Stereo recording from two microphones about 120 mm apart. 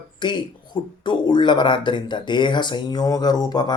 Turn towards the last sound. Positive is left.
turn(degrees=35)  # may be behind; listen again after turning